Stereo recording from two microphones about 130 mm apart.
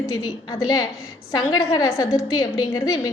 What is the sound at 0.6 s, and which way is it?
A woman's voice, 30° left (ahead or behind).